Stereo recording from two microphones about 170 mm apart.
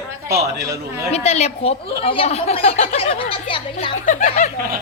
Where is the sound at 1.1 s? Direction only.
40° left (ahead or behind).